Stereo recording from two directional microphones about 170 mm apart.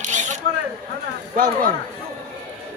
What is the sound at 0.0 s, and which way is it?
Single-lens reflex camera, 45° right (ahead or behind).